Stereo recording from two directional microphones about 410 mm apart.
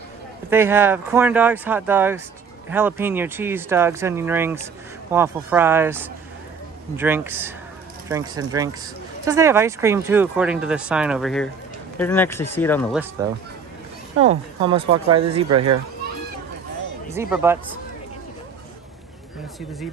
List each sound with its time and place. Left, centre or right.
0.5 s speech: centre
17.1 s speech: centre